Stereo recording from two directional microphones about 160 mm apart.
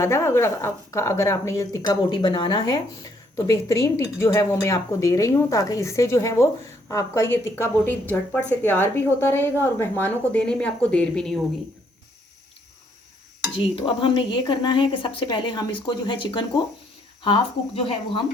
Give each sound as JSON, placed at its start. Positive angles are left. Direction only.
{"t": 0.0, "sound": "a woman's voice", "side_deg": 15}
{"t": 13.6, "sound": "speech", "side_deg": 35}